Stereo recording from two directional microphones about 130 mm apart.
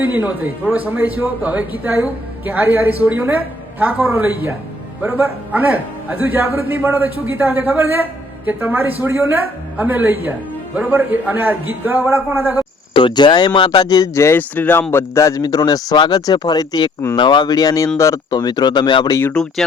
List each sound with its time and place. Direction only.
0.0 s a man's voice: 15° right (ahead or behind)
12.9 s speech: 40° left (ahead or behind)
19.3 s speech: 5° left (ahead or behind)